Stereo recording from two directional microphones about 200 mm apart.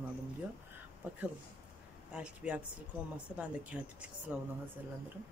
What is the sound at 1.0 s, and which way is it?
Speech, 10° right (ahead or behind).